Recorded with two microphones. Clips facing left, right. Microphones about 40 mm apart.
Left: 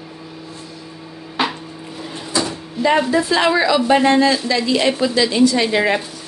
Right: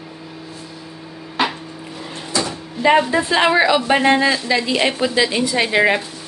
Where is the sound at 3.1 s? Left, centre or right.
Right.